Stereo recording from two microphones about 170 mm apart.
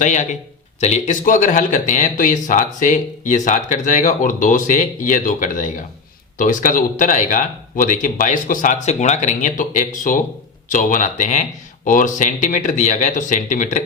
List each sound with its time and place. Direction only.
0.0 s speech: 45° left (ahead or behind)